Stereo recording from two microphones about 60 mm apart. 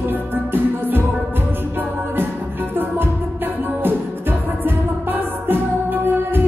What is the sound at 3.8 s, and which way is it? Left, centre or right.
Music, right.